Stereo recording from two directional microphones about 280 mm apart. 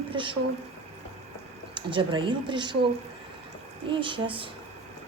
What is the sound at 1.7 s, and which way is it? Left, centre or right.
A woman's voice, centre.